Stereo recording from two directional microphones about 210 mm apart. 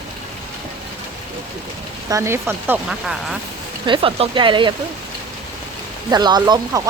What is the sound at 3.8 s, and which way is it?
Speech, 25° right (ahead or behind).